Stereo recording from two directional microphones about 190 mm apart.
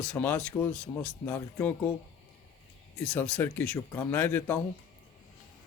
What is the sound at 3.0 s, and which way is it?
Speech, 5° left (ahead or behind).